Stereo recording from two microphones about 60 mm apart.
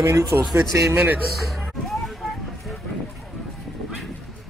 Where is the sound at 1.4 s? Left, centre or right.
Centre.